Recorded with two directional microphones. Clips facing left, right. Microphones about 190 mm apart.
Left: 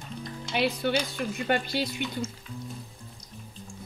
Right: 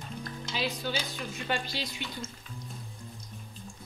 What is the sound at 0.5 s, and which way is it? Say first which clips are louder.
Speech: left 7 dB; 65° left (ahead or behind).